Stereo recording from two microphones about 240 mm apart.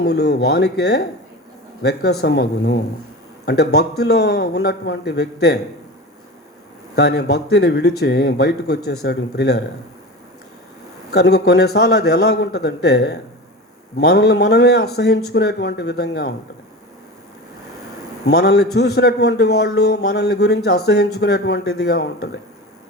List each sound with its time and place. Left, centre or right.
0.0 s a man's voice: left
6.9 s speech: left
11.1 s a man's voice: left
18.3 s a man's voice: left